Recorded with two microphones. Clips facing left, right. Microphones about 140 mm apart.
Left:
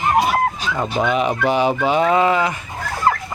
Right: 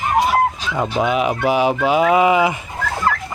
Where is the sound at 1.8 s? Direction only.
5° right (ahead or behind).